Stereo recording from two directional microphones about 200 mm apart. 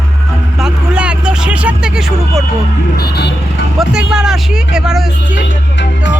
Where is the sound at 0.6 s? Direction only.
5° right (ahead or behind).